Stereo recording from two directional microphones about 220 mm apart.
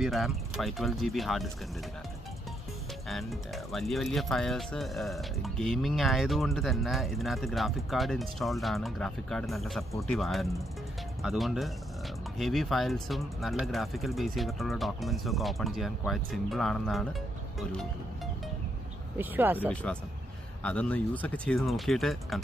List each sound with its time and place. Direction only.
0.0 s speech: centre (ahead or behind)
3.1 s speech: centre (ahead or behind)
19.7 s speech: 5° left (ahead or behind)